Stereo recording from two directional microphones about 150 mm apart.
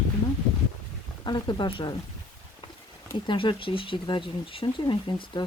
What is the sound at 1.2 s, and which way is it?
Speech, 30° left (ahead or behind).